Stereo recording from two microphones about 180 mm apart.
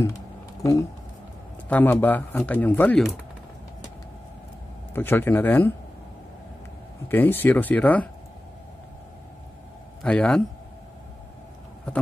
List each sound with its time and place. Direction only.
0.6 s speech: 15° left (ahead or behind)
4.9 s speech: 10° left (ahead or behind)
7.1 s speech: 10° left (ahead or behind)
10.0 s speech: 5° left (ahead or behind)